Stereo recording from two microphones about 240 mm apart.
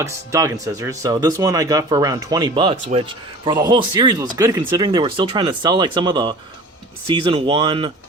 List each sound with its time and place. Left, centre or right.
0.0 s speech: centre